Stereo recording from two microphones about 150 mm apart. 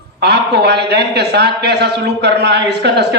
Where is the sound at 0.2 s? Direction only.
90° right.